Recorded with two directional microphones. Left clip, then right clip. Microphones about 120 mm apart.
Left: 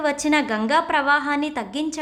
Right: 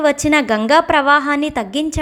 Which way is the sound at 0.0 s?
40° right (ahead or behind).